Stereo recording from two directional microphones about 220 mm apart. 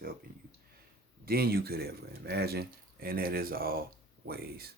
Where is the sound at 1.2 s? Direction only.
45° right (ahead or behind).